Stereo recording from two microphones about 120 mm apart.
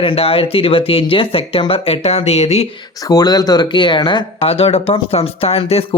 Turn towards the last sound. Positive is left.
turn(degrees=55)  # may be behind; listen again after turning